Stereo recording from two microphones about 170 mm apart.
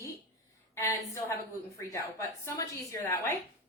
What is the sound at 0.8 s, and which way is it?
Speech, 20° left (ahead or behind).